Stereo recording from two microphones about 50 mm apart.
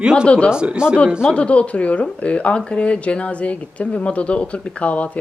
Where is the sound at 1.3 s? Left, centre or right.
Left.